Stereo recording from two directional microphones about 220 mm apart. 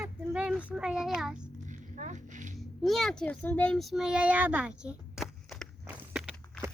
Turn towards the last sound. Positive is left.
turn(degrees=-5)  # may be behind; listen again after turning